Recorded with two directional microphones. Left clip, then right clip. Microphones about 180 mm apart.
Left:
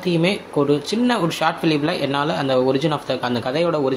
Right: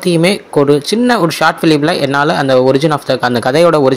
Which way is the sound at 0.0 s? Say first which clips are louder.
Right 8 dB; 45° right (ahead or behind).